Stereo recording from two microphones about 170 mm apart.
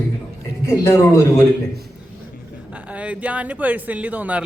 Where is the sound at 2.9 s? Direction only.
10° right (ahead or behind).